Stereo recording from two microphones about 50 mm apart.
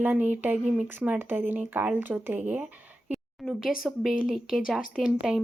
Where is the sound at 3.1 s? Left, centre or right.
Centre.